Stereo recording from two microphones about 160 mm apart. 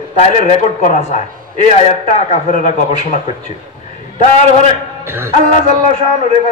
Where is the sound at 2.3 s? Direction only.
45° left (ahead or behind).